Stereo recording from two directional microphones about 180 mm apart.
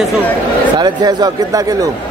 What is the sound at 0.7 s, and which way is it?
Speech, 25° right (ahead or behind).